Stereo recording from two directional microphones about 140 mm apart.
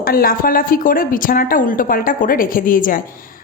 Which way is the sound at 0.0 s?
90° left.